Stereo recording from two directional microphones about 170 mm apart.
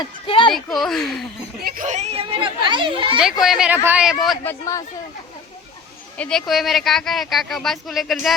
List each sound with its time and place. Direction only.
0.0 s a sound: 30° left (ahead or behind)
0.5 s speech: centre (ahead or behind)
1.6 s speech: 50° right (ahead or behind); by 3.2 s 30° right (ahead or behind)
3.4 s speech: 5° right (ahead or behind)
4.4 s speech: 20° left (ahead or behind)
6.1 s speech: 5° left (ahead or behind)